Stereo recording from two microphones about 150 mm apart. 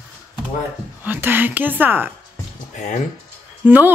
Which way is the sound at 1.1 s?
15° right (ahead or behind).